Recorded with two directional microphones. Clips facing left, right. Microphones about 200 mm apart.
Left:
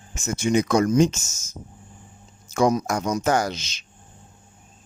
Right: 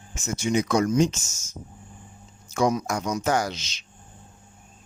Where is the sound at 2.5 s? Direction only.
45° left (ahead or behind).